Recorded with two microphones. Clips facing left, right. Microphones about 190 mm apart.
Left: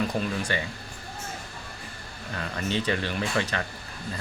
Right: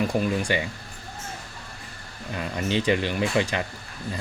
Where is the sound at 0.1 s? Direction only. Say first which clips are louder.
Right 4 dB; 15° right (ahead or behind).